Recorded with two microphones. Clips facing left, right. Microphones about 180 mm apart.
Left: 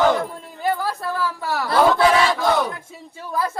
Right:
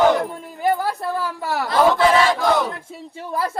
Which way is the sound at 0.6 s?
20° right (ahead or behind).